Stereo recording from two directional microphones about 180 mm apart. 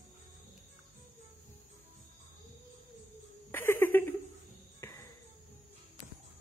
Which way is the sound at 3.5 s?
10° left (ahead or behind).